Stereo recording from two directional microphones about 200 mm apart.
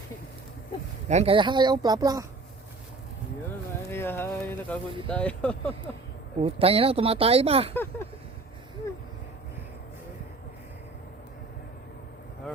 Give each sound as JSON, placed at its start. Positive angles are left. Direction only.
{"t": 1.0, "sound": "speech", "side_deg": -30}
{"t": 3.8, "sound": "speech", "side_deg": 10}
{"t": 6.4, "sound": "speech", "side_deg": -30}
{"t": 7.7, "sound": "speech", "side_deg": 10}